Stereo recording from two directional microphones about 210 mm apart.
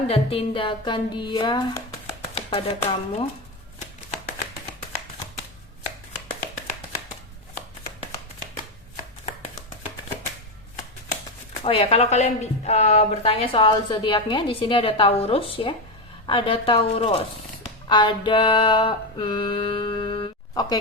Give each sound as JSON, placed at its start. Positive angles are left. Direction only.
{"t": 0.1, "sound": "a woman's voice", "side_deg": 25}
{"t": 11.6, "sound": "a woman's voice", "side_deg": 25}
{"t": 17.8, "sound": "music", "side_deg": 20}